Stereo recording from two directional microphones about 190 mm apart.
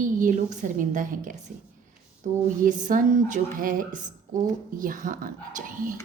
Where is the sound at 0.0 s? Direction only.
45° right (ahead or behind).